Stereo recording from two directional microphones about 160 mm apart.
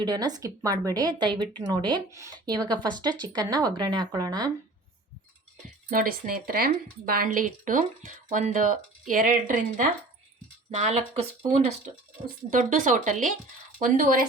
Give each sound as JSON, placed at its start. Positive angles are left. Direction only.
{"t": 0.0, "sound": "speech", "side_deg": -25}
{"t": 5.9, "sound": "speech", "side_deg": -60}
{"t": 10.7, "sound": "speech", "side_deg": -45}
{"t": 12.5, "sound": "speech", "side_deg": -55}